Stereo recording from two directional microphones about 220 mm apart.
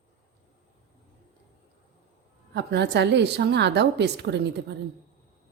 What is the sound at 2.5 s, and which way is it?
A woman's voice, 50° right (ahead or behind).